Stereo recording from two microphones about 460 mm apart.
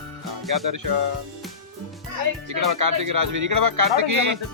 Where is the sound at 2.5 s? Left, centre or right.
Right.